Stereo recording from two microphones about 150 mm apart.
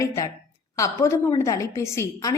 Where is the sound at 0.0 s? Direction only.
20° left (ahead or behind).